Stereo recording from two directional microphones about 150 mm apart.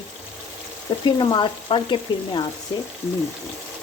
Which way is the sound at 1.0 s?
30° left (ahead or behind).